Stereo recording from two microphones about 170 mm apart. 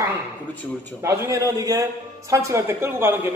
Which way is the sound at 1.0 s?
20° right (ahead or behind).